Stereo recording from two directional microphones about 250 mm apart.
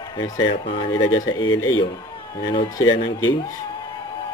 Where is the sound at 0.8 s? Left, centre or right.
Left.